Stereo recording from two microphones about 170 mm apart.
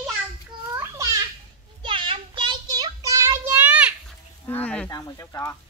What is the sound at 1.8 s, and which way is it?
Child singing, 30° right (ahead or behind).